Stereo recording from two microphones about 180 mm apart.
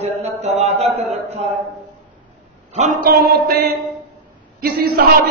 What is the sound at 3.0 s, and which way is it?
Speech, 55° right (ahead or behind).